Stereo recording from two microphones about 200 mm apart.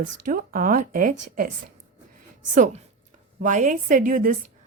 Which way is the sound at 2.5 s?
40° right (ahead or behind).